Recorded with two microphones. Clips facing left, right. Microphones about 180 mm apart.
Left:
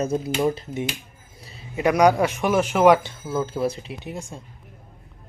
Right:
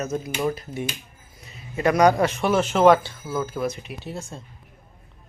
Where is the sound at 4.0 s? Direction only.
15° left (ahead or behind).